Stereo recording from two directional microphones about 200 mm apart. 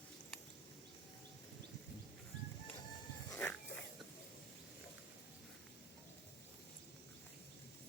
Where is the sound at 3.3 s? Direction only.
5° left (ahead or behind).